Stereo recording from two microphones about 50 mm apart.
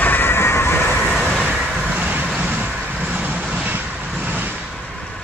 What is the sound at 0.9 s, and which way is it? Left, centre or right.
Vehicle, left.